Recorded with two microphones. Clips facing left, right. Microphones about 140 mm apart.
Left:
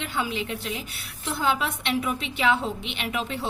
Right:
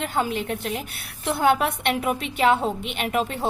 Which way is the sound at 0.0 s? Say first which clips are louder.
Right 4 dB; 45° right (ahead or behind).